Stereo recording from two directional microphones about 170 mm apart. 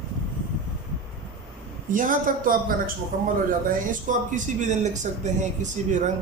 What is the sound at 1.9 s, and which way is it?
Speech, 50° right (ahead or behind).